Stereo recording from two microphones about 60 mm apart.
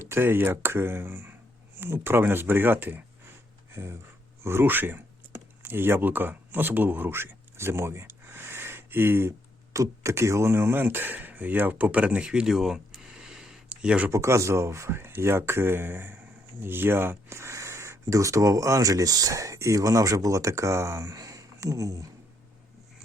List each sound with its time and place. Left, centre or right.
0.1 s speech: right
3.7 s a sound: right
4.4 s speech: right
9.7 s speech: right; by 13.5 s centre
13.7 s a sound: centre
14.1 s speech: right